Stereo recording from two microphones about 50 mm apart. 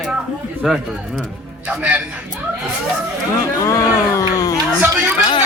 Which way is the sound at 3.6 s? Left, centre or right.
Left.